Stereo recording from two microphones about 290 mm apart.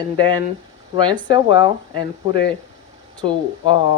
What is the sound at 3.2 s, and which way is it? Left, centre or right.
Speech, centre.